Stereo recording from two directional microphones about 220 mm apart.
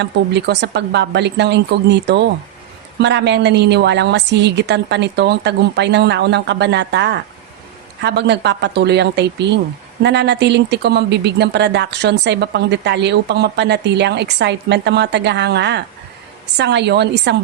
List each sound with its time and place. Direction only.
0.0 s a woman's voice: 50° right (ahead or behind)